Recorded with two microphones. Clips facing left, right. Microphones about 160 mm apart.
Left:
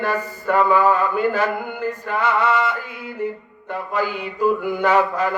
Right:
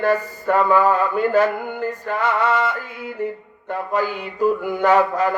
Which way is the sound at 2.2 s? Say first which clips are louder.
Even; 45° right (ahead or behind).